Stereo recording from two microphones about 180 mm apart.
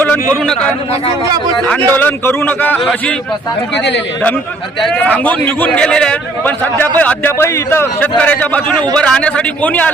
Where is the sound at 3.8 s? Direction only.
80° left.